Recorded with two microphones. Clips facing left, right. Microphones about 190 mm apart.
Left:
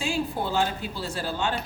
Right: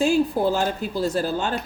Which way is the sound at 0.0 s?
40° right (ahead or behind).